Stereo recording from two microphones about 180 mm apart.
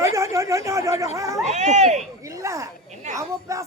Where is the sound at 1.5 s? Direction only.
40° right (ahead or behind).